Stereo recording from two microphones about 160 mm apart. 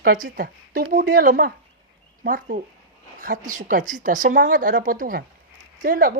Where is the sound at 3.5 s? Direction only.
55° right (ahead or behind).